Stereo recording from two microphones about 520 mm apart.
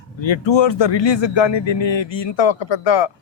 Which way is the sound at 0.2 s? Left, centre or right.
Left.